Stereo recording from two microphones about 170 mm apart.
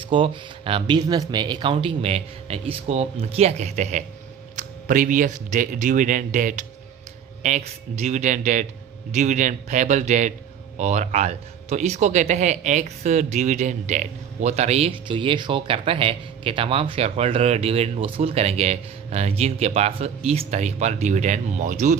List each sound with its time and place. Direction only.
0.0 s speech: 30° right (ahead or behind); by 21.9 s 50° right (ahead or behind)